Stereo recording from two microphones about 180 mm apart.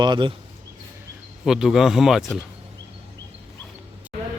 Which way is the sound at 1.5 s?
Centre (ahead or behind).